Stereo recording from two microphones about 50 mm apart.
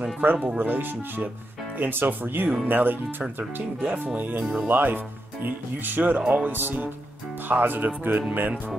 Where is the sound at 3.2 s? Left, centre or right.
Right.